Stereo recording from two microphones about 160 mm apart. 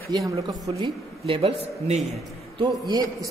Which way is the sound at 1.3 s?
35° right (ahead or behind).